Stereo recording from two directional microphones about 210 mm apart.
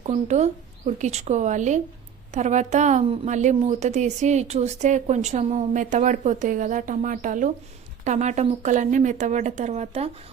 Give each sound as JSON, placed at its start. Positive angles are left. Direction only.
{"t": 0.0, "sound": "a woman's voice", "side_deg": -35}